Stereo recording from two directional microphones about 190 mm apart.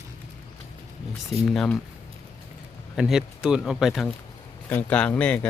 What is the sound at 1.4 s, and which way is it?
Speech, centre (ahead or behind).